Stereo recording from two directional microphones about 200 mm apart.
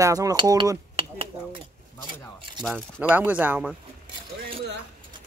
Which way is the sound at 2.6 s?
5° right (ahead or behind).